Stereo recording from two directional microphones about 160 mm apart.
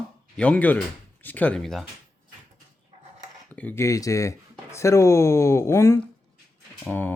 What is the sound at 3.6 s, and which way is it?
Speech, 15° left (ahead or behind).